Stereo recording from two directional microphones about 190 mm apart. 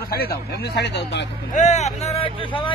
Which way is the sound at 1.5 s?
40° left (ahead or behind).